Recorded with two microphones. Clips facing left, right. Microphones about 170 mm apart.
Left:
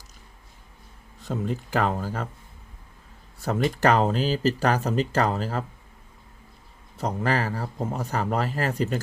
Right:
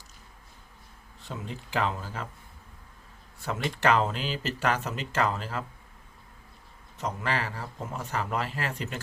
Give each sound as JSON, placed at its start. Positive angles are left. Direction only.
{"t": 1.2, "sound": "speech", "side_deg": 45}
{"t": 3.4, "sound": "speech", "side_deg": 40}
{"t": 6.9, "sound": "speech", "side_deg": 35}